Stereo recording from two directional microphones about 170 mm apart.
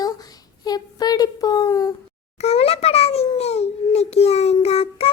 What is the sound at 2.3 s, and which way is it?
Babbling, 35° left (ahead or behind).